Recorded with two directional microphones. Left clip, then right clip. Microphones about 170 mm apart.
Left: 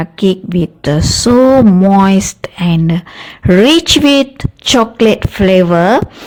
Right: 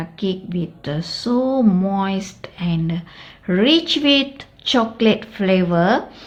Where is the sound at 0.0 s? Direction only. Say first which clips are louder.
Left 11 dB; 65° left (ahead or behind).